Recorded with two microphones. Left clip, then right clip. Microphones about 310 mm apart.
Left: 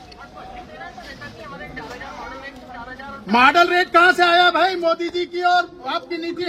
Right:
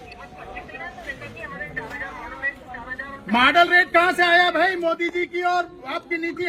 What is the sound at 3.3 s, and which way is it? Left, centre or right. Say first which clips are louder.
A man's voice: left 2 dB; centre.